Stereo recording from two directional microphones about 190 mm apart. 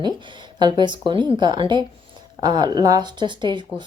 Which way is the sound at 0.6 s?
25° right (ahead or behind).